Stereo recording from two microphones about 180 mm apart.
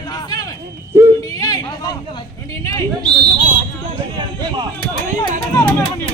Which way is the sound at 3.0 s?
30° right (ahead or behind).